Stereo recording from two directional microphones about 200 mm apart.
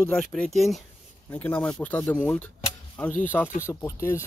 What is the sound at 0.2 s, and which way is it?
Speech, centre (ahead or behind).